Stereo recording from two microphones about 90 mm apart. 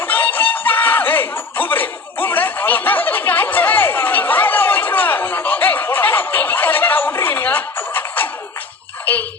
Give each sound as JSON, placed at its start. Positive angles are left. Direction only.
{"t": 0.0, "sound": "snicker", "side_deg": 20}